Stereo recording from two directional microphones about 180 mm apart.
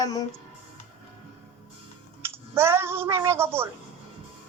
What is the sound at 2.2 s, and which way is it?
Speech, 15° right (ahead or behind).